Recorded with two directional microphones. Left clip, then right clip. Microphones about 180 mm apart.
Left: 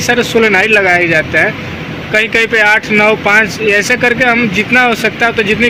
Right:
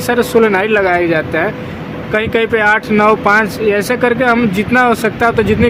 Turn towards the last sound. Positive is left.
turn(degrees=-20)  # may be behind; listen again after turning